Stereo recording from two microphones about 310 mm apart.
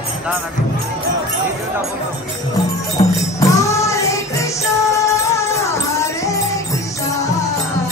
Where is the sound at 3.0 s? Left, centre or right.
Centre.